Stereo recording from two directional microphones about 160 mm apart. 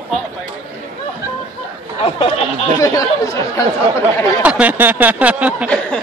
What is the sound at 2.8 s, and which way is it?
Speech, 20° left (ahead or behind).